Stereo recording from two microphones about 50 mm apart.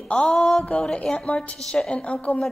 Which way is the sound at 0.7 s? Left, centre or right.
Left.